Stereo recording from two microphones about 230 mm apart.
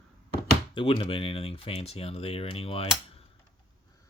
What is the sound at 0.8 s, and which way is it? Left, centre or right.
Speech, left.